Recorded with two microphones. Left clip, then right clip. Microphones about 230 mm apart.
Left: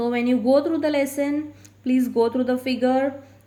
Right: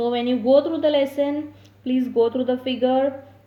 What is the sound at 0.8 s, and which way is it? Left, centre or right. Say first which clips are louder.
Speech: right 3 dB; left.